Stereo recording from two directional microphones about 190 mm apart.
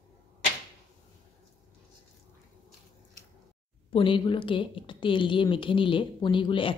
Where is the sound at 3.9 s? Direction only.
25° left (ahead or behind).